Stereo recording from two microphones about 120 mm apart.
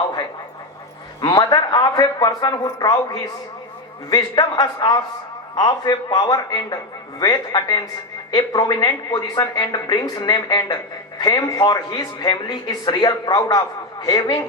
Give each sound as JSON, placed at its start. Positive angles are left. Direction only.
{"t": 1.2, "sound": "speech", "side_deg": 35}